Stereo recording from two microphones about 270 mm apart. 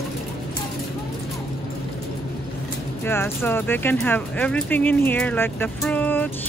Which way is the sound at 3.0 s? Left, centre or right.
Centre.